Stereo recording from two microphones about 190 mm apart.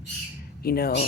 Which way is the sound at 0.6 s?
55° left (ahead or behind).